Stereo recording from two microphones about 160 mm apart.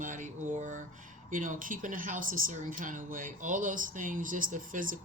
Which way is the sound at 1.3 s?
55° right (ahead or behind).